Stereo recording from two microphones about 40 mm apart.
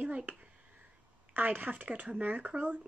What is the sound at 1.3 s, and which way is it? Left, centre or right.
A woman's voice, right.